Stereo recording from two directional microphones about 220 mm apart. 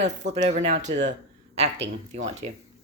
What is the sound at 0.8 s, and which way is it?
Speech, 55° right (ahead or behind).